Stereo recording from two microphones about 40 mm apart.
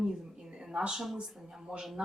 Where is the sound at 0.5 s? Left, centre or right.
Centre.